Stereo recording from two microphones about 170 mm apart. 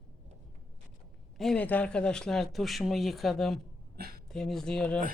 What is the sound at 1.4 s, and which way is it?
Speech, 5° left (ahead or behind).